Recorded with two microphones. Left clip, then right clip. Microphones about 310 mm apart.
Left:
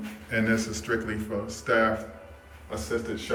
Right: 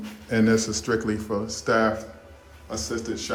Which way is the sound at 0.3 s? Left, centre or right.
Centre.